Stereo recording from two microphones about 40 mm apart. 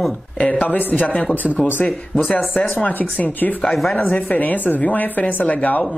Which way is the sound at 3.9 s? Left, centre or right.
Left.